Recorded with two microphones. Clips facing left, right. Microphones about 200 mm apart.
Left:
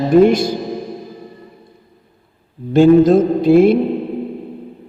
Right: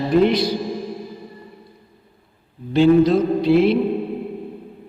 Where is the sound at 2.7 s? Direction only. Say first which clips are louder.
Left 5 dB; 45° left (ahead or behind).